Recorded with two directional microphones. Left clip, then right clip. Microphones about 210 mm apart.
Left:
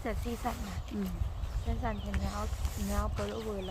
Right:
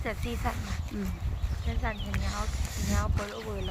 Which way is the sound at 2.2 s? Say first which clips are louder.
Right 3 dB; 5° left (ahead or behind).